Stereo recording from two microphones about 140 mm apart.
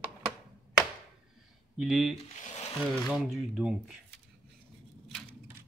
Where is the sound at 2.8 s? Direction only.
5° right (ahead or behind).